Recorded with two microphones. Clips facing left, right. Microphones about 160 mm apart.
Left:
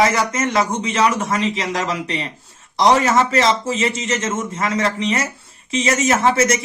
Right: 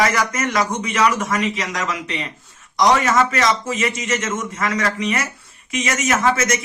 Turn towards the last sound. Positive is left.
turn(degrees=30)  # may be behind; listen again after turning